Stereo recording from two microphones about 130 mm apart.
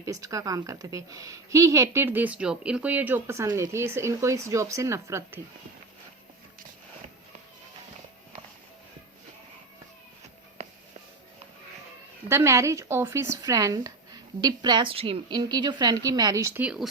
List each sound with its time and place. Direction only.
0.0 s a woman's voice: 25° right (ahead or behind)
12.3 s a woman's voice: 20° right (ahead or behind)